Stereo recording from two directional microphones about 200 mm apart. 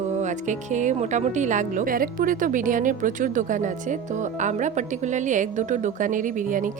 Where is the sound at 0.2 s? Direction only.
35° right (ahead or behind).